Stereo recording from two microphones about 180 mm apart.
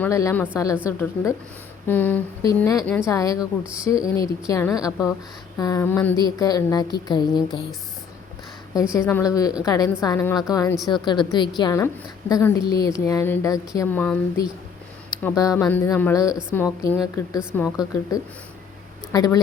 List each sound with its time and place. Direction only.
0.0 s speech: 15° left (ahead or behind)
8.7 s speech: 15° left (ahead or behind)